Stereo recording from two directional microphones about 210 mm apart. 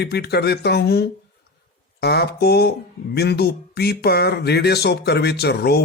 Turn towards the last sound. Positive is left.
turn(degrees=50)  # may be behind; listen again after turning